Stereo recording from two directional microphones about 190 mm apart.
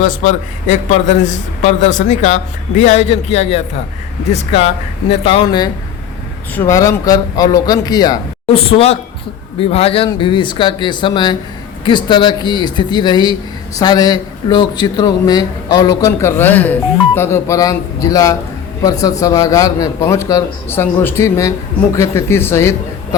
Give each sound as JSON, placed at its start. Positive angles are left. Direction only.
{"t": 0.0, "sound": "a man's voice", "side_deg": 40}
{"t": 8.4, "sound": "a man's voice", "side_deg": 30}